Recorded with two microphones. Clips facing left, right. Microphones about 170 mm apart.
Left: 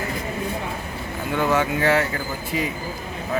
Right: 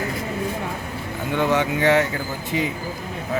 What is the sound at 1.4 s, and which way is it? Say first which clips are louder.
Speech: right 1 dB; 20° right (ahead or behind).